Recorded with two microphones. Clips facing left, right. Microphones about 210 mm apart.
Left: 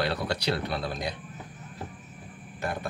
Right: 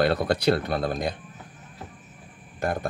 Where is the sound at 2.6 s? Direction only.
45° right (ahead or behind).